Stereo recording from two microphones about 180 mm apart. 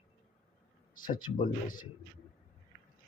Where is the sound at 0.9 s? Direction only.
50° left (ahead or behind).